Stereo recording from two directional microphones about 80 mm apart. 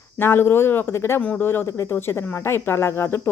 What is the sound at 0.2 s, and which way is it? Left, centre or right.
A woman's voice, left.